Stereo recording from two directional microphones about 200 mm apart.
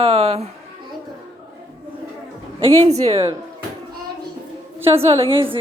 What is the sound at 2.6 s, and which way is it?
Speech, 30° right (ahead or behind).